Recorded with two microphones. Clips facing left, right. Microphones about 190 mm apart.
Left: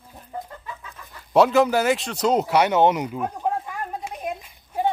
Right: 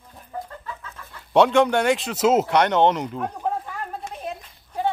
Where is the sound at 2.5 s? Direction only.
10° left (ahead or behind).